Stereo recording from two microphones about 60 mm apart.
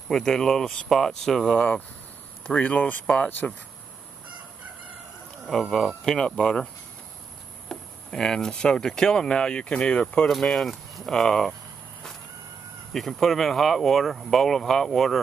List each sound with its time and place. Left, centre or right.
0.1 s speech: centre
2.4 s speech: left
5.5 s speech: centre
10.2 s speech: centre
12.9 s speech: centre